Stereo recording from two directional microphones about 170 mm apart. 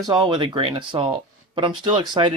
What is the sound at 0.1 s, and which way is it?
Speech, 25° right (ahead or behind).